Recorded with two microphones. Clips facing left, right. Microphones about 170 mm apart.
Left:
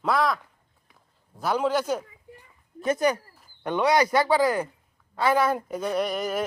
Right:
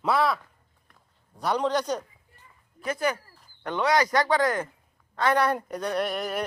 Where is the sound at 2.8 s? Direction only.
25° left (ahead or behind).